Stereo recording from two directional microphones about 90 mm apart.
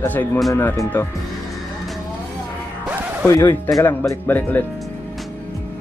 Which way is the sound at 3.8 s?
30° left (ahead or behind).